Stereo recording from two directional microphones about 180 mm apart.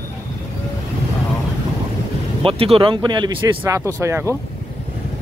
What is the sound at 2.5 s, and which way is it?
A man's voice, 30° right (ahead or behind).